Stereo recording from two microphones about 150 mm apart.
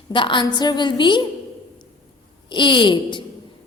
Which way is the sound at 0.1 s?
35° left (ahead or behind).